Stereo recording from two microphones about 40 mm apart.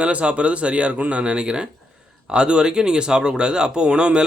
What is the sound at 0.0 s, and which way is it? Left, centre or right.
Speech, right.